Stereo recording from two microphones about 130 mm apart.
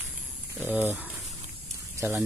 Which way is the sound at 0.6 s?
10° right (ahead or behind).